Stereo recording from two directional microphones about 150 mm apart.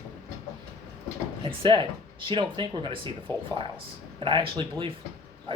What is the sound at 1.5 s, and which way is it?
Speech, 35° right (ahead or behind).